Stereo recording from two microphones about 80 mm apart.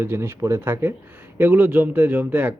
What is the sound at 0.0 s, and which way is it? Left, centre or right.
Speech, right.